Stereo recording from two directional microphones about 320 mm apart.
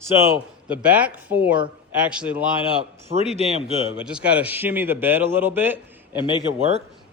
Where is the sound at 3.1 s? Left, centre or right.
Centre.